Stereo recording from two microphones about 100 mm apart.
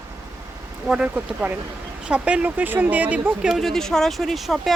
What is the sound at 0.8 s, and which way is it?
Speech, 10° right (ahead or behind).